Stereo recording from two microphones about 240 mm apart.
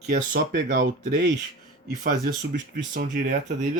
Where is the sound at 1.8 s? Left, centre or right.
Right.